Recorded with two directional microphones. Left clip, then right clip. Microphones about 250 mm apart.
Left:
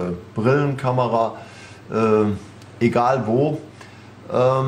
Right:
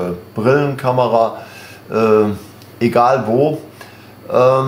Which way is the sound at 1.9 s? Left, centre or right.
Centre.